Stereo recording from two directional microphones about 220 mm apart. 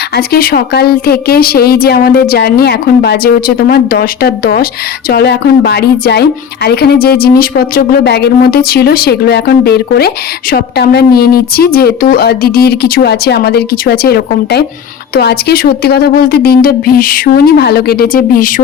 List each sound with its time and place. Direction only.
0.3 s speech: 45° left (ahead or behind)